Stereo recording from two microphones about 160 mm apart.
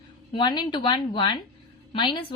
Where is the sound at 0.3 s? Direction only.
25° left (ahead or behind).